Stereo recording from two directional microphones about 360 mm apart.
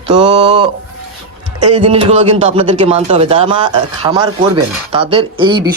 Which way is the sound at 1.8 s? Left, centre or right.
Centre.